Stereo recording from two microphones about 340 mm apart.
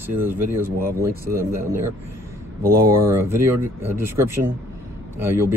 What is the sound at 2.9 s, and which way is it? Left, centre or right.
Speech, centre.